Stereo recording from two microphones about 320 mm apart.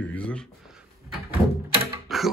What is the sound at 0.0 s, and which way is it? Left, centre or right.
Speech, centre.